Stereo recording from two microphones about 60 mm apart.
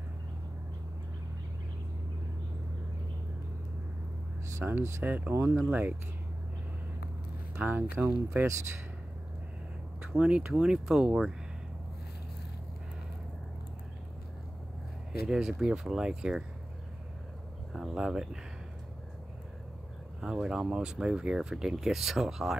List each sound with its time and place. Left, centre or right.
4.6 s speech: right
5.7 s speech: right
7.5 s speech: right
10.0 s speech: centre
15.2 s speech: centre
17.7 s speech: centre
20.2 s speech: centre